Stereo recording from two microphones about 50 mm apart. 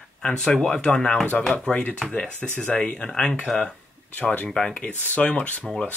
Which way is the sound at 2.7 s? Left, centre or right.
Left.